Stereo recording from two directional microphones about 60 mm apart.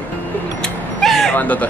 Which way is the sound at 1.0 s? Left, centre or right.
Centre.